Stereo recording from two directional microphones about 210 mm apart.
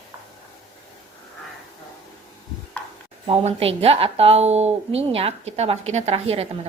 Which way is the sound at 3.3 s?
30° right (ahead or behind).